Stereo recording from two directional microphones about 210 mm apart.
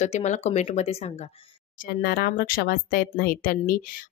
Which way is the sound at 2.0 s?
45° left (ahead or behind).